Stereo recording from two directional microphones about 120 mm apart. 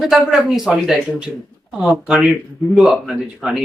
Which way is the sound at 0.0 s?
Centre (ahead or behind).